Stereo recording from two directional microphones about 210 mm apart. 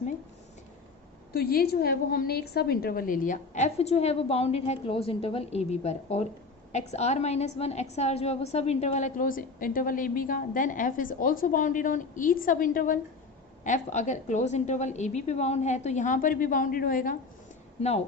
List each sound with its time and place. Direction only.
1.3 s a woman's voice: 45° left (ahead or behind)